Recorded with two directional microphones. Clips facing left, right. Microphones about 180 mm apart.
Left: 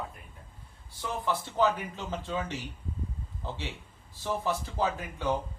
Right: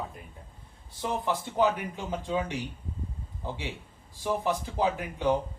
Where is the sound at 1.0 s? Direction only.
15° right (ahead or behind).